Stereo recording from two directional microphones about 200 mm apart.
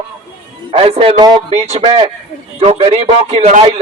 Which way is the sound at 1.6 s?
30° right (ahead or behind).